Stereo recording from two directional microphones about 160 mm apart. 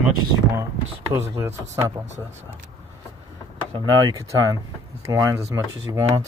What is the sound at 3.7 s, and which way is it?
Speech, 25° right (ahead or behind).